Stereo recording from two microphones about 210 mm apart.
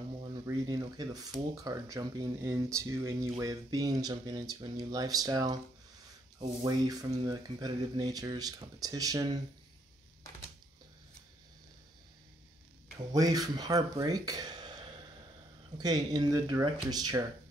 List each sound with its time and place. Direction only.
0.2 s speech: 20° right (ahead or behind)
6.6 s speech: 15° right (ahead or behind)
13.1 s speech: 15° right (ahead or behind)
15.8 s speech: 20° right (ahead or behind)